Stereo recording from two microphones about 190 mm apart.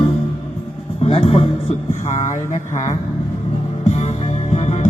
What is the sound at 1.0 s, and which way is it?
Speech, 30° left (ahead or behind).